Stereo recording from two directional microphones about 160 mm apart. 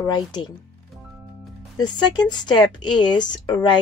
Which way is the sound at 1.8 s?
25° left (ahead or behind).